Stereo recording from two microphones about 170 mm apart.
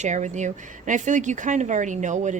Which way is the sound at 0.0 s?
45° right (ahead or behind).